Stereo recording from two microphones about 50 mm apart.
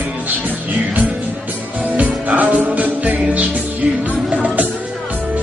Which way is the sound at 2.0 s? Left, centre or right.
Right.